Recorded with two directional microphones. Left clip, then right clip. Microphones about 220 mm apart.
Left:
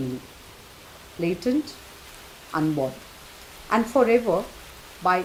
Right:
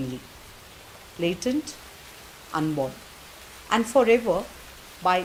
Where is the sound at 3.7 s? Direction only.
40° right (ahead or behind).